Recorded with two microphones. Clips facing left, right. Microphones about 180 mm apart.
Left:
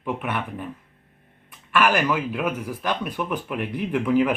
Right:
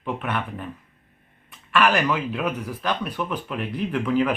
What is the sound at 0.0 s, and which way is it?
Speech, 10° left (ahead or behind).